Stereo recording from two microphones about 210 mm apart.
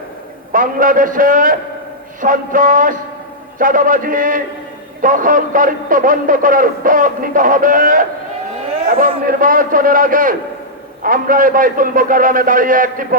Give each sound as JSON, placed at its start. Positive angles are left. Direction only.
{"t": 0.5, "sound": "a man's voice", "side_deg": -40}